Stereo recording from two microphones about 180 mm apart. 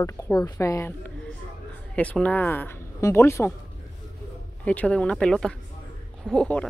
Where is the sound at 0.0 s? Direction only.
20° left (ahead or behind).